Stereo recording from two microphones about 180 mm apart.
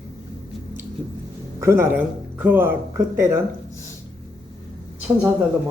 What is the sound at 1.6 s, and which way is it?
Speech, 15° right (ahead or behind).